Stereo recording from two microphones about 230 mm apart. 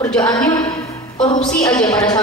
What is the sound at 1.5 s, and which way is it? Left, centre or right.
Speech, centre.